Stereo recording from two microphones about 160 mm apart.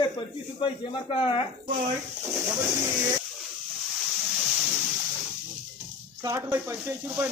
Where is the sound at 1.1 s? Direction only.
35° left (ahead or behind).